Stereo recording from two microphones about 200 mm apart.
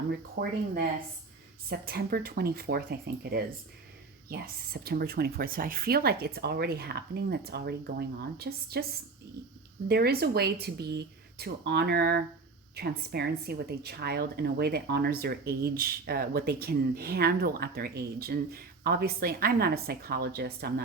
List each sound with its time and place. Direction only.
0.1 s a woman's voice: 45° right (ahead or behind)
4.3 s a woman's voice: 50° right (ahead or behind)
9.9 s a woman's voice: 50° right (ahead or behind)